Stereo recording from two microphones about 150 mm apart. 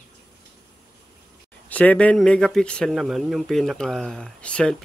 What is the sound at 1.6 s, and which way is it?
Speech, 10° left (ahead or behind).